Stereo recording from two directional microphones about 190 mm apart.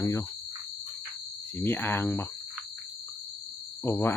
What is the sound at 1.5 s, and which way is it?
Speech, 10° left (ahead or behind).